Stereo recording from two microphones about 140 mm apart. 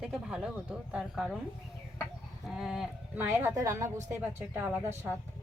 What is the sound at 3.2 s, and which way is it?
Speech, 20° right (ahead or behind).